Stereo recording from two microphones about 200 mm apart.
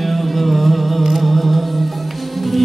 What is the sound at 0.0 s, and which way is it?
Music, centre (ahead or behind).